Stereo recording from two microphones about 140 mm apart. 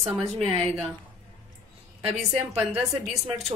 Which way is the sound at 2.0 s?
50° right (ahead or behind).